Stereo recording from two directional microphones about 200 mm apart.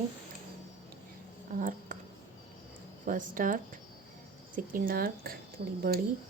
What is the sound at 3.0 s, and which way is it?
Speech, 40° right (ahead or behind).